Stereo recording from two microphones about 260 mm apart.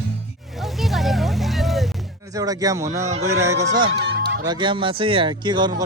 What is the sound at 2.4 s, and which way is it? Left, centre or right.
Speech, centre.